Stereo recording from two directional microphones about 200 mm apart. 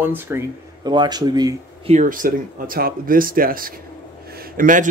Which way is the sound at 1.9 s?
40° right (ahead or behind).